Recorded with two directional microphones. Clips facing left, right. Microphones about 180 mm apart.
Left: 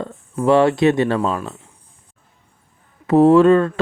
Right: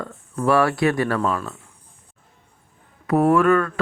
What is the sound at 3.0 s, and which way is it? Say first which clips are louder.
Speech: left 6 dB; 25° left (ahead or behind).